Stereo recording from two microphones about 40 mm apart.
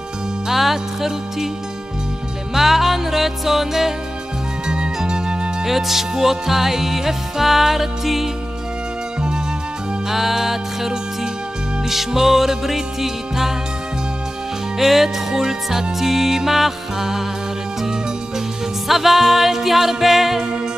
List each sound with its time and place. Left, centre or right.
0.5 s music: centre
2.5 s music: centre
4.6 s music: right
5.6 s music: centre
10.0 s music: centre
14.8 s music: centre
18.9 s music: centre